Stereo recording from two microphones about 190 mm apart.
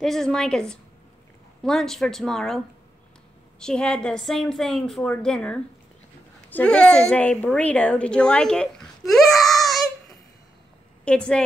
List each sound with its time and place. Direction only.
0.0 s a woman's voice: centre (ahead or behind)